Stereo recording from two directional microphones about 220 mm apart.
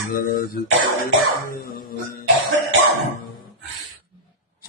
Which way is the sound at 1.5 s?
40° left (ahead or behind).